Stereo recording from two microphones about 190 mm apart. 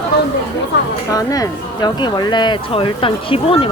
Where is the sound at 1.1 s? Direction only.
20° left (ahead or behind).